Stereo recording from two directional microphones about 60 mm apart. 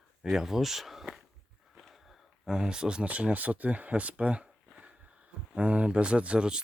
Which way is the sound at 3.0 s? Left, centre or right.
Right.